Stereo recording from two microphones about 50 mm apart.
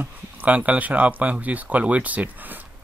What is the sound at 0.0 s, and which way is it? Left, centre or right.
Speech, right.